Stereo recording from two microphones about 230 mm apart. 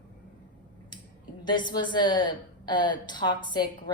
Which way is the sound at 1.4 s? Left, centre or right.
Centre.